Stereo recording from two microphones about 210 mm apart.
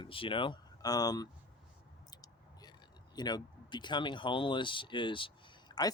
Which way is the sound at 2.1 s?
20° left (ahead or behind).